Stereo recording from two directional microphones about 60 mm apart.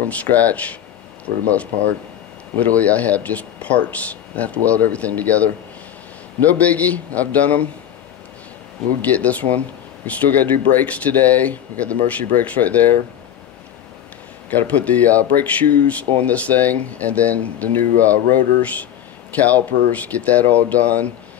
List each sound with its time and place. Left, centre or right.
0.1 s speech: left
2.6 s speech: left
6.6 s speech: left
9.0 s speech: left
14.5 s speech: left